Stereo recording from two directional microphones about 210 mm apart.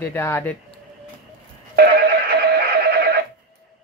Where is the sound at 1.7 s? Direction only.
50° right (ahead or behind).